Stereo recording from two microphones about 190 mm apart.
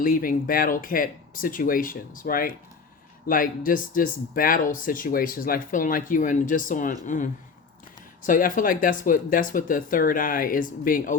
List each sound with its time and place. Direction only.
0.0 s speech: 50° left (ahead or behind)
8.3 s speech: 45° left (ahead or behind)